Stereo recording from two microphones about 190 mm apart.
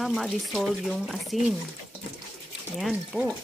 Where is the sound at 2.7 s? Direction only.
Centre (ahead or behind).